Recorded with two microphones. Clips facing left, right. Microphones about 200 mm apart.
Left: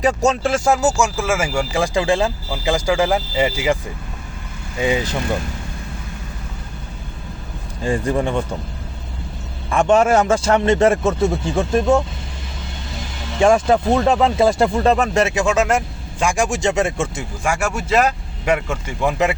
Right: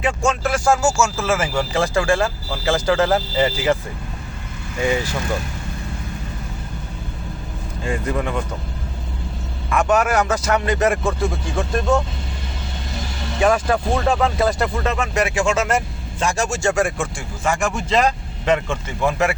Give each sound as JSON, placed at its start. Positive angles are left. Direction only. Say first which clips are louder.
{"t": 0.0, "sound": "speech", "louder": "left 3 dB", "side_deg": 40}
{"t": 0.5, "sound": "speech", "louder": "left 1 dB", "side_deg": 20}
{"t": 4.8, "sound": "speech", "louder": "left 1 dB", "side_deg": 20}
{"t": 7.9, "sound": "speech", "louder": "left 4 dB", "side_deg": 30}
{"t": 9.6, "sound": "speech", "louder": "left 4 dB", "side_deg": 30}
{"t": 13.4, "sound": "speech", "louder": "left 4 dB", "side_deg": 25}
{"t": 17.4, "sound": "speech", "louder": "even", "side_deg": 10}